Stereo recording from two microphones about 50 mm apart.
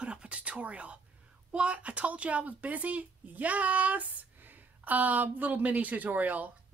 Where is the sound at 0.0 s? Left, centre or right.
Right.